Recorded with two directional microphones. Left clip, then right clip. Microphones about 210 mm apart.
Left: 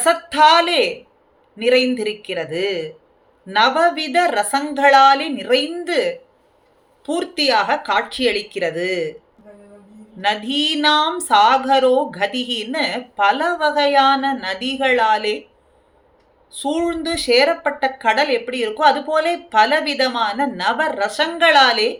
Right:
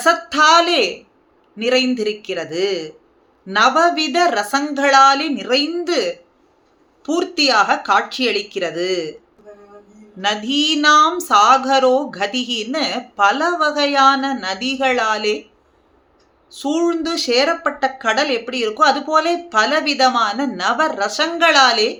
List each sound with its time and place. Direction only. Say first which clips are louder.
0.0 s speech: even; 15° right (ahead or behind)
10.2 s speech: right 1 dB; 15° right (ahead or behind)
16.5 s speech: right 2 dB; 15° right (ahead or behind)